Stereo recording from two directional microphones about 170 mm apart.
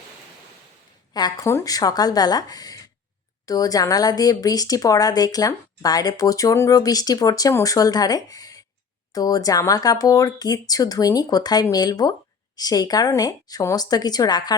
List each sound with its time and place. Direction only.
1.1 s speech: 20° left (ahead or behind)